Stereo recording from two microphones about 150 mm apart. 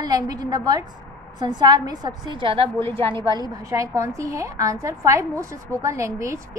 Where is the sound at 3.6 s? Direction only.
20° right (ahead or behind).